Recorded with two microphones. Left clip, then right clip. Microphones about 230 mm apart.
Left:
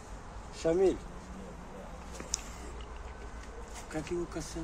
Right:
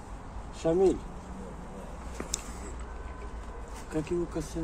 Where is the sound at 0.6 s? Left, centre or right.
Centre.